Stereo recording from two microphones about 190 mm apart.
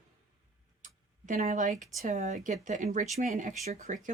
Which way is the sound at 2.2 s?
40° right (ahead or behind).